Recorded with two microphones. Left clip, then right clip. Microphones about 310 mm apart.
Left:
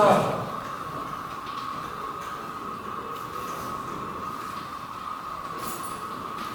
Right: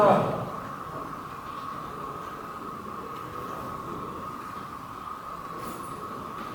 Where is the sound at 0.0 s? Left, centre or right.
Centre.